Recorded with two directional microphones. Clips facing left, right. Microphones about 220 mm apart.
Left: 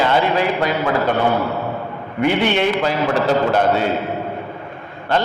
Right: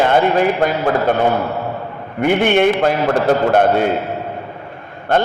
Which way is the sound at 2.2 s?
50° right (ahead or behind).